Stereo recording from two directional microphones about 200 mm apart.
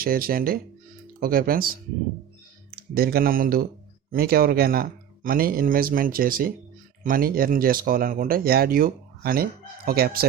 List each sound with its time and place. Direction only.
0.0 s speech: 45° right (ahead or behind)
2.7 s speech: 50° right (ahead or behind)